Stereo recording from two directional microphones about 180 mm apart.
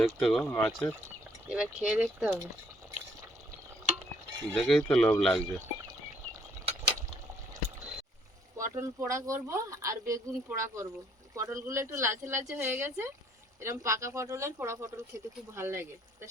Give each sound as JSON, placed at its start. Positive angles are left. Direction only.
{"t": 0.0, "sound": "speech", "side_deg": 0}
{"t": 4.5, "sound": "speech", "side_deg": 5}
{"t": 8.5, "sound": "speech", "side_deg": -15}